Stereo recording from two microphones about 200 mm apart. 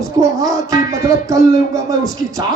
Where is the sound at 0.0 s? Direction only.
15° right (ahead or behind).